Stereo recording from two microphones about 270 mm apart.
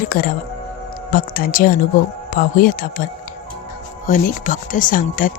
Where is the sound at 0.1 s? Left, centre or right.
Left.